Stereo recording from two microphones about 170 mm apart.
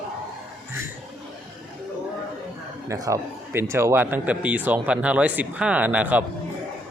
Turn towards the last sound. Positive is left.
turn(degrees=-10)  # may be behind; listen again after turning